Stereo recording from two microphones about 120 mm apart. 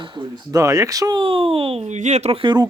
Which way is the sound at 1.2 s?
50° right (ahead or behind).